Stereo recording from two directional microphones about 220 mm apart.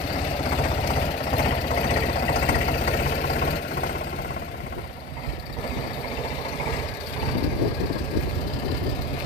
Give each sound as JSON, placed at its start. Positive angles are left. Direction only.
{"t": 0.8, "sound": "vehicle", "side_deg": 30}